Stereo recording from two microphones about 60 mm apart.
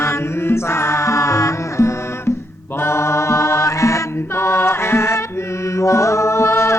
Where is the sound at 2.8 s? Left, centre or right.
Left.